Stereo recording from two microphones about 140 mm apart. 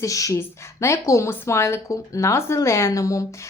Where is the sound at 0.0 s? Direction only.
25° left (ahead or behind).